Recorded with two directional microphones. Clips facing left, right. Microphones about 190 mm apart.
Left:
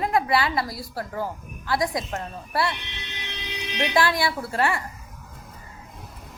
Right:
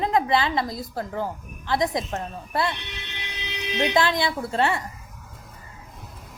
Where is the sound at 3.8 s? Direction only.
20° right (ahead or behind).